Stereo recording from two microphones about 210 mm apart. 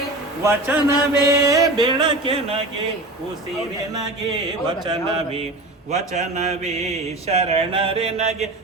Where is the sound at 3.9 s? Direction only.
20° right (ahead or behind).